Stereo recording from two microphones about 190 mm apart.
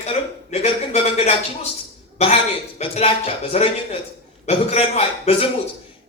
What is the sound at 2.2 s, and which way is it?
A man's voice, 35° left (ahead or behind).